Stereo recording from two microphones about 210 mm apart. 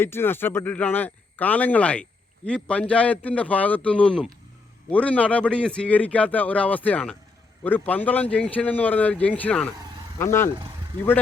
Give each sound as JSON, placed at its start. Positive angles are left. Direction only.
{"t": 0.0, "sound": "speech", "side_deg": 10}